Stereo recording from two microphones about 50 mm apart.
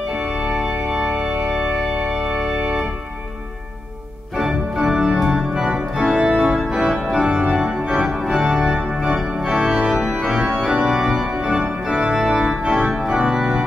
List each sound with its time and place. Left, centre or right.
0.4 s organ: right
4.4 s organ: centre
8.7 s organ: centre